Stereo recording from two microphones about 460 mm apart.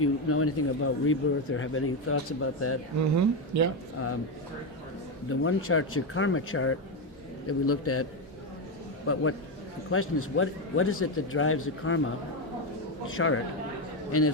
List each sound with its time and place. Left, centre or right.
0.0 s speech: left
3.2 s speech: right
5.3 s speech: left
9.1 s speech: left